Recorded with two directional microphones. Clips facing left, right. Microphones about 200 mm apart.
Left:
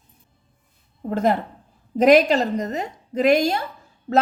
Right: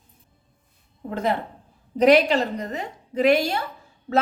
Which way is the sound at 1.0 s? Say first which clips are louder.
Left 4 dB; 45° left (ahead or behind).